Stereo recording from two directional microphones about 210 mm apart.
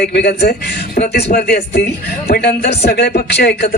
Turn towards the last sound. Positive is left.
turn(degrees=50)  # may be behind; listen again after turning